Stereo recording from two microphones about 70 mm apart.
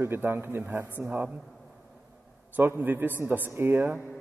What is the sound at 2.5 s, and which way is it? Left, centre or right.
A man's voice, right.